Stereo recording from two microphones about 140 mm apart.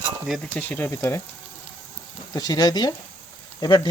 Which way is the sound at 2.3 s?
30° left (ahead or behind).